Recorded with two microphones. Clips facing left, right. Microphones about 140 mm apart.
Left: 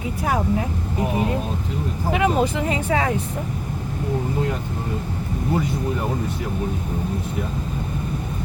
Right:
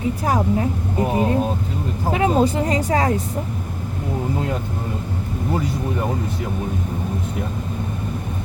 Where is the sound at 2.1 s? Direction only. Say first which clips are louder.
Right 2 dB; 35° right (ahead or behind).